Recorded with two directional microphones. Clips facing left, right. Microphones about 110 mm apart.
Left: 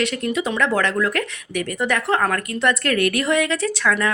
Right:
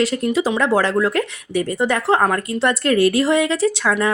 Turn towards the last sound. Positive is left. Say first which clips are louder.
# right 3 dB
turn(degrees=-30)  # may be behind; listen again after turning